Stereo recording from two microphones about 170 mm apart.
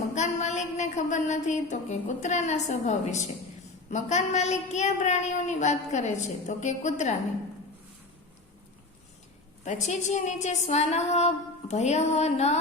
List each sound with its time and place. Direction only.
0.1 s a woman's voice: 45° left (ahead or behind)
9.6 s a woman's voice: 45° left (ahead or behind)